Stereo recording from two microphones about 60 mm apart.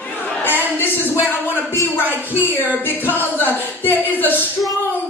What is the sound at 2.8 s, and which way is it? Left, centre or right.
Speech, left.